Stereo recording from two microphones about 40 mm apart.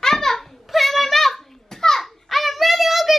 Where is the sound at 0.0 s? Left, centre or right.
Centre.